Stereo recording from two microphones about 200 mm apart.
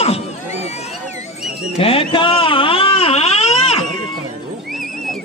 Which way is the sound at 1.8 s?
25° left (ahead or behind).